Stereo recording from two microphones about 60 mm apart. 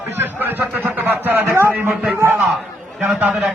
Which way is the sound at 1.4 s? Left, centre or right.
Right.